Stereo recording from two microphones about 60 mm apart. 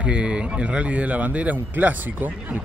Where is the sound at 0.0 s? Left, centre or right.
Centre.